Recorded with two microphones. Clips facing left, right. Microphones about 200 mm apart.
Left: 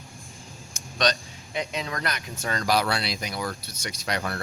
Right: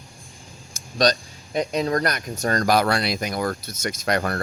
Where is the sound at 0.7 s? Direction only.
35° right (ahead or behind).